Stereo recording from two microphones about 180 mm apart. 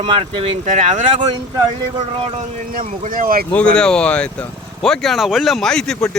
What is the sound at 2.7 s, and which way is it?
Speech, 50° right (ahead or behind).